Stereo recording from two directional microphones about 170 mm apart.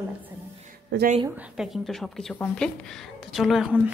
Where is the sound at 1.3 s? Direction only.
10° right (ahead or behind).